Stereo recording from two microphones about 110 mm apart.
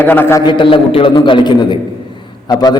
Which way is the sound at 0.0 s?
20° left (ahead or behind).